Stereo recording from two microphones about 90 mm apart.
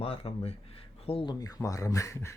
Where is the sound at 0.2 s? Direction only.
90° left.